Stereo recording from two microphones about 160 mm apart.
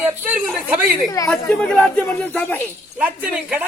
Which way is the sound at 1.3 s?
5° left (ahead or behind).